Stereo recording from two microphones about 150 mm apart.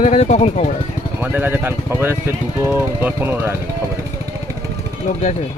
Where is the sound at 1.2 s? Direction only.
15° right (ahead or behind).